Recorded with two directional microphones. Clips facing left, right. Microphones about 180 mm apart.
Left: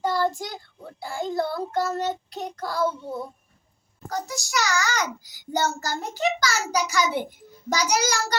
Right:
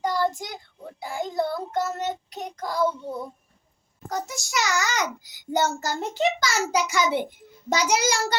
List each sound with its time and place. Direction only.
0.0 s child singing: 15° right (ahead or behind)
4.1 s a child's voice: 20° right (ahead or behind)